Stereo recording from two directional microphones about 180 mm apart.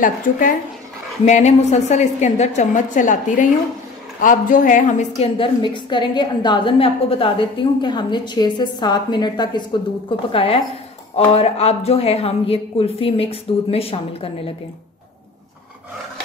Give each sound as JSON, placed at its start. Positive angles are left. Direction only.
{"t": 0.0, "sound": "a woman's voice", "side_deg": 50}